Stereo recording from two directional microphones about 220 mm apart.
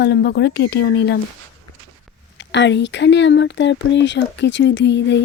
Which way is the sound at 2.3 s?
55° left (ahead or behind).